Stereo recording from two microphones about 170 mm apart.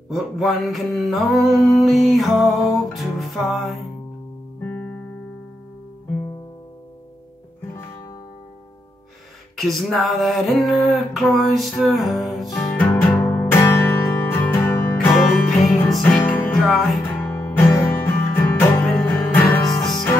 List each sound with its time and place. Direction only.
0.1 s music: centre (ahead or behind)
9.6 s music: centre (ahead or behind)
12.5 s music: 15° left (ahead or behind)
16.6 s music: centre (ahead or behind)
17.5 s music: 15° left (ahead or behind)